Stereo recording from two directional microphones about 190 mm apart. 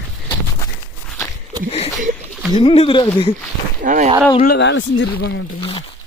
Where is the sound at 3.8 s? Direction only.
40° right (ahead or behind).